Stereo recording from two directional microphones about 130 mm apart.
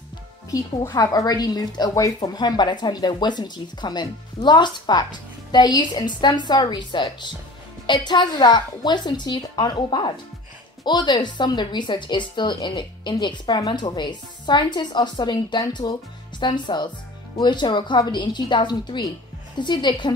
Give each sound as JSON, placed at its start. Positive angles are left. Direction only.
{"t": 0.5, "sound": "a woman's voice", "side_deg": 25}